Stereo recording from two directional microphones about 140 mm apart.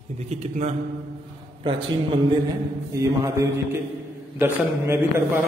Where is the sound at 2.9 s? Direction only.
20° right (ahead or behind).